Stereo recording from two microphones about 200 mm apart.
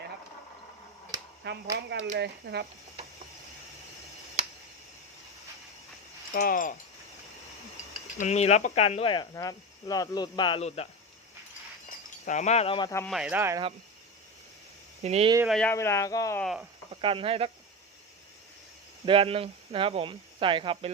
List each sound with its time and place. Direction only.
1.7 s speech: 65° right (ahead or behind)
6.3 s speech: 45° left (ahead or behind)
8.2 s speech: 35° left (ahead or behind)
12.2 s speech: 35° left (ahead or behind)
13.1 s speech: 5° right (ahead or behind)
15.0 s speech: 30° right (ahead or behind)
15.4 s speech: centre (ahead or behind)
15.7 s speech: 15° left (ahead or behind)
16.4 s speech: centre (ahead or behind)
16.9 s speech: 25° right (ahead or behind)
19.0 s speech: 25° right (ahead or behind)